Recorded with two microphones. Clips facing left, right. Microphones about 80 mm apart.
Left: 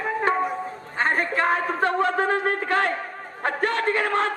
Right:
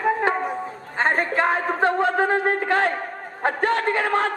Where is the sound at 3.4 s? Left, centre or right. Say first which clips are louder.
Right 3 dB; right.